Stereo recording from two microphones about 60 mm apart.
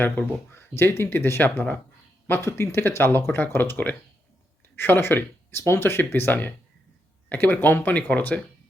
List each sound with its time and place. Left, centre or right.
0.5 s speech: left